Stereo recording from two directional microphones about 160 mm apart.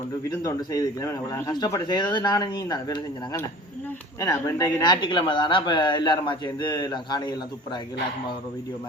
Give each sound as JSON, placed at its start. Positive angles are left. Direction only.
{"t": 0.3, "sound": "speech", "side_deg": 20}